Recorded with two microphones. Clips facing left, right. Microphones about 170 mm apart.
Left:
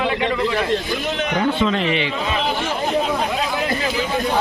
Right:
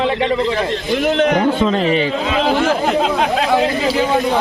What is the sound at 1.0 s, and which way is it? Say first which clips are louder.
Speech: right 8 dB; 55° right (ahead or behind).